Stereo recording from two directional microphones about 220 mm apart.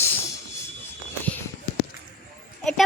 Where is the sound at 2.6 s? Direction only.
Centre (ahead or behind).